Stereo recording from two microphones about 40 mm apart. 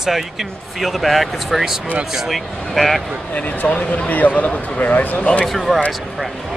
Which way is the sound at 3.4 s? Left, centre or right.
Left.